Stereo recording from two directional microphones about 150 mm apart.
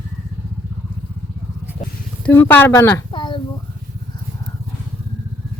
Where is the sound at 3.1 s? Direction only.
30° left (ahead or behind).